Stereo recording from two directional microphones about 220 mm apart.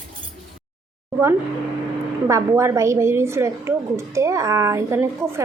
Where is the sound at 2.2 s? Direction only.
15° right (ahead or behind).